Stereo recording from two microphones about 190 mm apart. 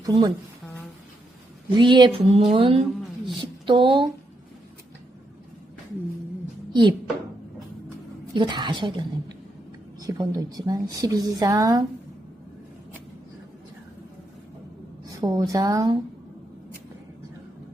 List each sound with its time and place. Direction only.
0.0 s a woman's voice: 20° right (ahead or behind)
1.7 s a woman's voice: 25° right (ahead or behind)
8.4 s a woman's voice: 25° right (ahead or behind)
15.2 s a woman's voice: 20° right (ahead or behind)